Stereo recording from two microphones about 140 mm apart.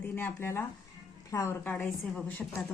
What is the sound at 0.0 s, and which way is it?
A woman's voice, 10° left (ahead or behind).